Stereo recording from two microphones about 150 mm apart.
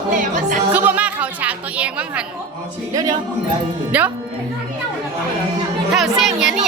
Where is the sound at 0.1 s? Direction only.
60° right (ahead or behind).